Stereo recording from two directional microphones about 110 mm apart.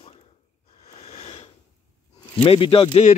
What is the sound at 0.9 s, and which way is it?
Sniff, 70° left (ahead or behind).